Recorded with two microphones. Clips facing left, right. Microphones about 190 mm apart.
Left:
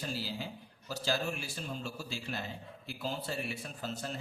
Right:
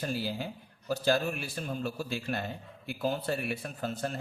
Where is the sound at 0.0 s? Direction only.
55° right (ahead or behind).